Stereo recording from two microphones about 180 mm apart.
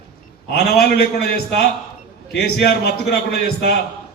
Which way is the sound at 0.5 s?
65° left (ahead or behind).